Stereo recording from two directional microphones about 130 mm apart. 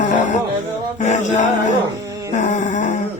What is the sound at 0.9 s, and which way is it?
Music, 65° left (ahead or behind).